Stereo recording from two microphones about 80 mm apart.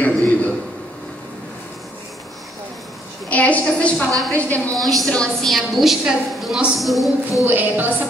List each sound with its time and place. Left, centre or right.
0.0 s a sound: centre
3.3 s a woman's voice: centre
4.8 s a woman's voice: centre
5.1 s a woman's voice: centre
5.8 s a woman's voice: centre
7.4 s a woman's voice: right